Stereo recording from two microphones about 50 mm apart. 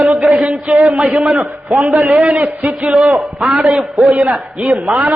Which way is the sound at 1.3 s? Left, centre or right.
Right.